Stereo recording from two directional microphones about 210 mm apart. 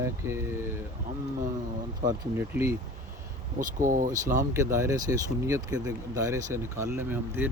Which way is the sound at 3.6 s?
40° right (ahead or behind).